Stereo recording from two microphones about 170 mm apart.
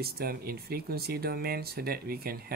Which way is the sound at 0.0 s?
65° right (ahead or behind).